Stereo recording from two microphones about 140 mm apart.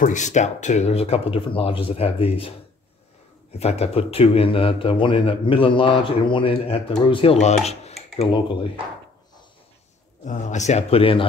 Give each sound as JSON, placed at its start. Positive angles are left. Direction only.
{"t": 0.0, "sound": "speech", "side_deg": 60}
{"t": 3.5, "sound": "speech", "side_deg": 50}
{"t": 10.2, "sound": "speech", "side_deg": 60}